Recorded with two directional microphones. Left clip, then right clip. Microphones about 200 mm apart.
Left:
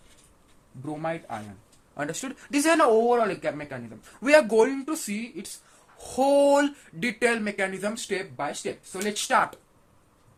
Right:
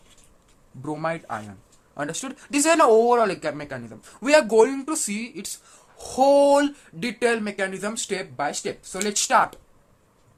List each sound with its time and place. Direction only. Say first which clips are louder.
0.8 s speech: right 4 dB; 25° right (ahead or behind)
2.0 s speech: right 2 dB; 10° right (ahead or behind)